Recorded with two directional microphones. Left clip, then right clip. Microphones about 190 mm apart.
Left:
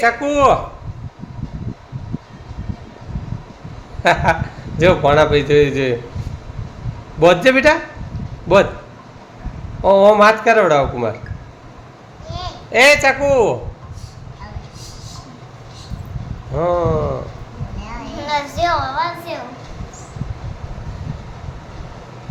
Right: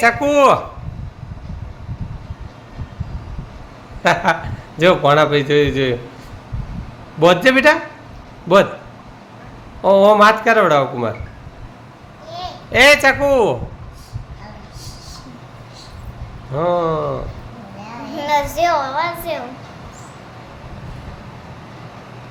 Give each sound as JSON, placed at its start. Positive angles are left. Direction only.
{"t": 0.0, "sound": "speech", "side_deg": -20}
{"t": 4.0, "sound": "speech", "side_deg": -10}
{"t": 7.2, "sound": "speech", "side_deg": -10}
{"t": 9.8, "sound": "speech", "side_deg": -10}
{"t": 12.7, "sound": "speech", "side_deg": -10}
{"t": 16.6, "sound": "speech", "side_deg": -15}
{"t": 18.2, "sound": "a child's voice", "side_deg": -35}